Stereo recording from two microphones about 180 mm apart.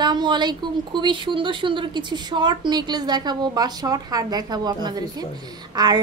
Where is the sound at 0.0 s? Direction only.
25° right (ahead or behind).